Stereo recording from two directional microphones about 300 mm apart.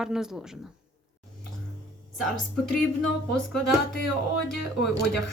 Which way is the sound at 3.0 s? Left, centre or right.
Centre.